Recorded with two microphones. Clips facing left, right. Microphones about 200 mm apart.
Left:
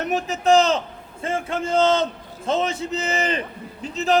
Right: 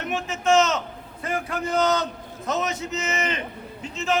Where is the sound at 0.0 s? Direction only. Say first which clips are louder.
Left 4 dB; 40° left (ahead or behind).